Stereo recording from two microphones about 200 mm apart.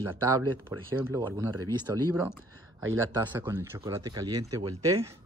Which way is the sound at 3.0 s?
15° right (ahead or behind).